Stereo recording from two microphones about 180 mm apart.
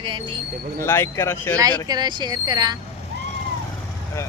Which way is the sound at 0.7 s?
15° left (ahead or behind).